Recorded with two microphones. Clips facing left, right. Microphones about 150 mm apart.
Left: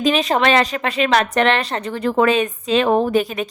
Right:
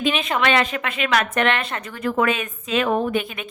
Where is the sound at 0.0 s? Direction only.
35° left (ahead or behind).